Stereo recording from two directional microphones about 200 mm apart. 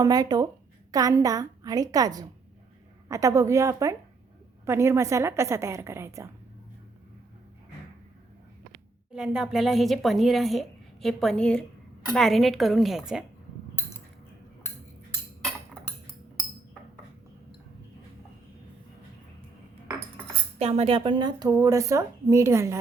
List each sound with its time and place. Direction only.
0.0 s a woman's voice: 20° right (ahead or behind)
9.1 s a woman's voice: 5° right (ahead or behind)
20.6 s a woman's voice: 30° right (ahead or behind); by 22.8 s 15° right (ahead or behind)